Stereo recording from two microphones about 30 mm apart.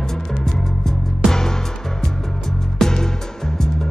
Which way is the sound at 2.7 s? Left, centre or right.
Centre.